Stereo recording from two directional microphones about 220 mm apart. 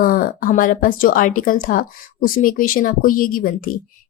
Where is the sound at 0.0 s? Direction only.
40° left (ahead or behind).